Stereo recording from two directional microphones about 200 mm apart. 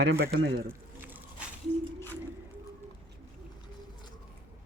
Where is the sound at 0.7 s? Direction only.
10° right (ahead or behind).